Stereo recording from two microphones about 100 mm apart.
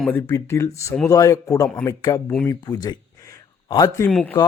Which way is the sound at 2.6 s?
40° left (ahead or behind).